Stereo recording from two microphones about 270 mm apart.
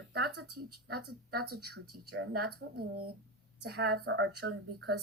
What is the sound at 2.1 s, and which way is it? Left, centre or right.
Speech, right.